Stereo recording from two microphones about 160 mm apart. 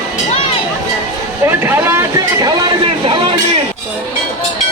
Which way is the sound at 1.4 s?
15° right (ahead or behind).